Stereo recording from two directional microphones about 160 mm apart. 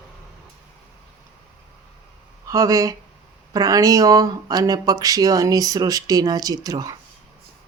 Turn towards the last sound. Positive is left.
turn(degrees=-20)  # may be behind; listen again after turning